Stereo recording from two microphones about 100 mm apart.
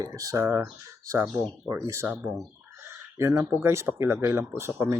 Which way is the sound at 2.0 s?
20° right (ahead or behind).